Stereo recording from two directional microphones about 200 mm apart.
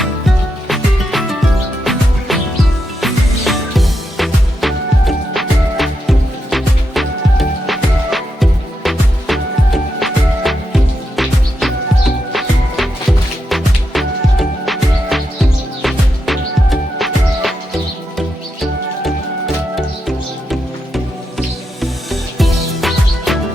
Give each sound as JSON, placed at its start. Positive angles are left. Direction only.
{"t": 0.7, "sound": "music", "side_deg": 0}
{"t": 19.7, "sound": "music", "side_deg": 0}